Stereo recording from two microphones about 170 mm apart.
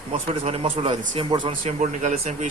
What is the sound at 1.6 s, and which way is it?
Speech, 45° right (ahead or behind).